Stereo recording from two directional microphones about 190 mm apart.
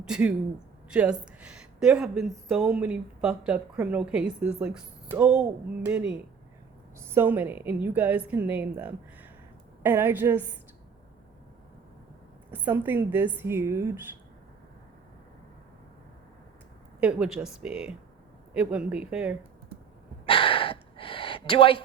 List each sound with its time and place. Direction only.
0.0 s a man's voice: 5° right (ahead or behind)
12.5 s a woman's voice: 10° right (ahead or behind)
17.0 s speech: 5° right (ahead or behind)
20.2 s gasp: 30° left (ahead or behind)